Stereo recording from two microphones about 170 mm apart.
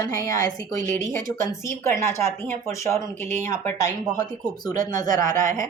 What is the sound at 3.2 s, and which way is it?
Speech, 45° right (ahead or behind).